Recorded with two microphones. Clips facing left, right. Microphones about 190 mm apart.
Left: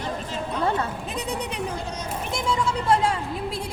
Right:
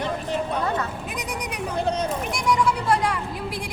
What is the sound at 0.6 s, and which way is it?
Speech, 30° left (ahead or behind).